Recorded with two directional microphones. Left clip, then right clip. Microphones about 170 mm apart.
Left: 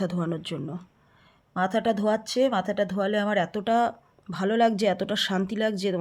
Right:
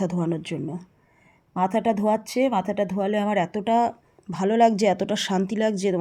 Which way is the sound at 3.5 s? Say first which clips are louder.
Right 2 dB; 5° left (ahead or behind).